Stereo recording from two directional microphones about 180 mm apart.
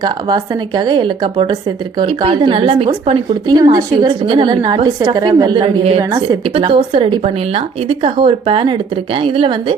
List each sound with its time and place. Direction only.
0.0 s a woman's voice: 25° right (ahead or behind)
3.6 s speech: 20° right (ahead or behind)